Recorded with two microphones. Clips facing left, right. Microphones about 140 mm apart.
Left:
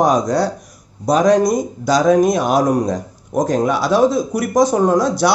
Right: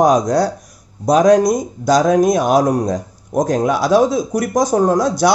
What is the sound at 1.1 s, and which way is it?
Speech, 5° right (ahead or behind).